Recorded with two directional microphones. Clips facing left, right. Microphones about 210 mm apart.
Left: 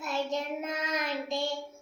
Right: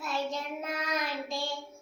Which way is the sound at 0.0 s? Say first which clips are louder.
Left 2 dB; 20° left (ahead or behind).